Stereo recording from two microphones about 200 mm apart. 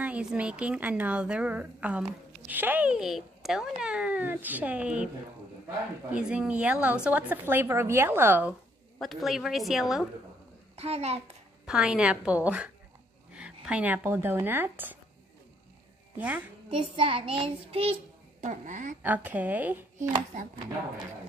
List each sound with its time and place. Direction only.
0.0 s speech: 5° right (ahead or behind)
6.1 s a woman's voice: 5° right (ahead or behind)
10.8 s speech: 30° right (ahead or behind)
11.6 s a woman's voice: 5° right (ahead or behind)
16.2 s speech: 5° right (ahead or behind)
16.9 s child singing: 25° right (ahead or behind)
18.4 s speech: 40° right (ahead or behind)
19.0 s speech: 10° right (ahead or behind)